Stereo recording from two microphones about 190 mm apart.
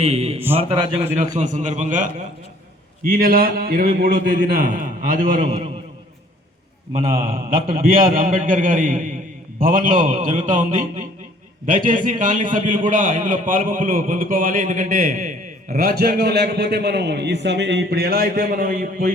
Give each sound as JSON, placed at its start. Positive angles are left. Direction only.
{"t": 0.0, "sound": "a man's voice", "side_deg": -35}
{"t": 5.4, "sound": "a man's voice", "side_deg": -25}
{"t": 6.9, "sound": "a man's voice", "side_deg": -45}